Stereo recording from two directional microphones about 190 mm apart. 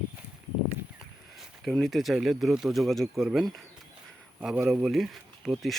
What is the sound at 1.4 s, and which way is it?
Speech, centre (ahead or behind).